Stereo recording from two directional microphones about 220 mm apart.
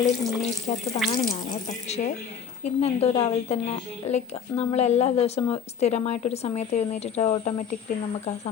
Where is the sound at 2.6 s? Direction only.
30° left (ahead or behind).